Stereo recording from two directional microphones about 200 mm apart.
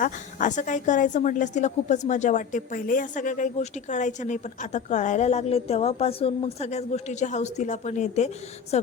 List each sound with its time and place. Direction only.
0.0 s a woman's voice: 40° left (ahead or behind)